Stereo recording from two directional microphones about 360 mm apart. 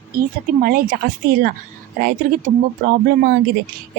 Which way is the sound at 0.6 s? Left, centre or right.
Right.